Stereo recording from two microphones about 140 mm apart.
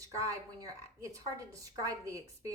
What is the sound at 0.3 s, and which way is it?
Speech, 20° right (ahead or behind).